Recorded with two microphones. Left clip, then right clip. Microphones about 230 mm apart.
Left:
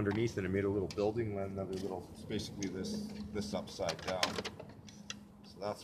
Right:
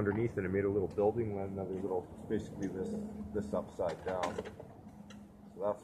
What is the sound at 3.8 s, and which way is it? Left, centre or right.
Speech, left.